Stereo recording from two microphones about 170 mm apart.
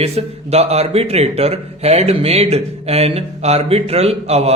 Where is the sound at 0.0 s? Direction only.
40° right (ahead or behind).